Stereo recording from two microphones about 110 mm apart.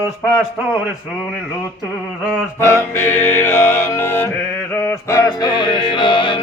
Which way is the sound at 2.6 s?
25° left (ahead or behind).